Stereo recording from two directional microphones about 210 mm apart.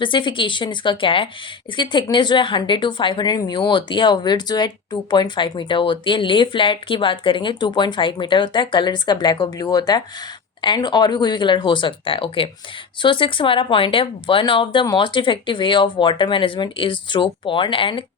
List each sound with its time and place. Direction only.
0.0 s a woman's voice: 25° left (ahead or behind)